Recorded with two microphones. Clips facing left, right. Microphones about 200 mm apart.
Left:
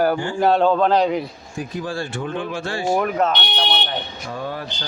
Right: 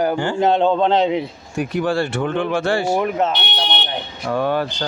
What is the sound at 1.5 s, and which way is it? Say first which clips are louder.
Speech: right 7 dB; 70° right (ahead or behind).